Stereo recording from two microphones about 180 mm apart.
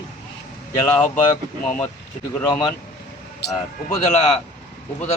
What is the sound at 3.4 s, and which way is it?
Speech, 65° left (ahead or behind).